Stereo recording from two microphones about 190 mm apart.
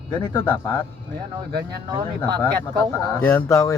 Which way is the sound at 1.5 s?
55° right (ahead or behind).